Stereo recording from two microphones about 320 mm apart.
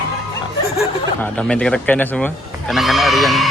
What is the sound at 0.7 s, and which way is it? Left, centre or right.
Speech, centre.